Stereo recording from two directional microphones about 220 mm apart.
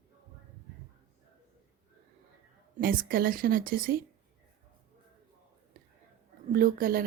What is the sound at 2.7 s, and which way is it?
Speech, 40° right (ahead or behind).